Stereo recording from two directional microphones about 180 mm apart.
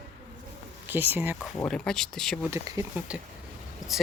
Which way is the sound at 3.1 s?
5° right (ahead or behind).